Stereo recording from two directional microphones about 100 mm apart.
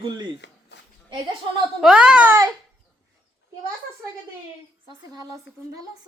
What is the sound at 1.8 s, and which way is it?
Speech, 10° right (ahead or behind).